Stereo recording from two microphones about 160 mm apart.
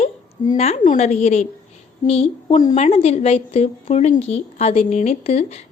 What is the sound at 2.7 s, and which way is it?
A woman's voice, 45° left (ahead or behind).